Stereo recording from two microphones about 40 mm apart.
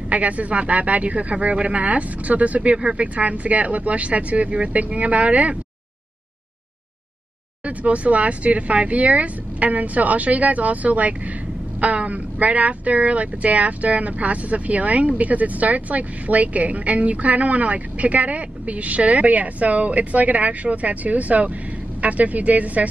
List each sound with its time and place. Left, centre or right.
0.1 s speech: right
7.6 s speech: right